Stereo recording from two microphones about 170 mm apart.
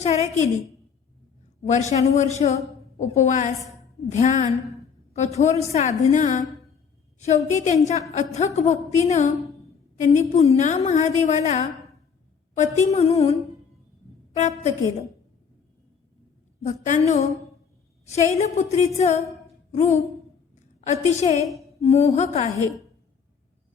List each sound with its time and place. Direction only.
0.0 s a woman's voice: 40° left (ahead or behind)
2.1 s a woman's voice: 45° left (ahead or behind)
16.6 s a woman's voice: 45° left (ahead or behind)
18.0 s a woman's voice: 40° left (ahead or behind)